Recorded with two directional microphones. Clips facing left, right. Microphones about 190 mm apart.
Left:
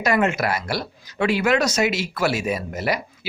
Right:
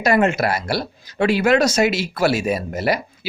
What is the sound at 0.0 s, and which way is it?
Speech, 30° right (ahead or behind).